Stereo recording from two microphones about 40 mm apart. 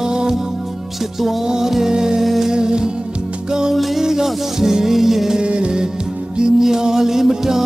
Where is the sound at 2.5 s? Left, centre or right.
Centre.